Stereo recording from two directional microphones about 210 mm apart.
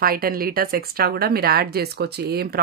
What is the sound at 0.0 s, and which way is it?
A woman's voice, 45° right (ahead or behind).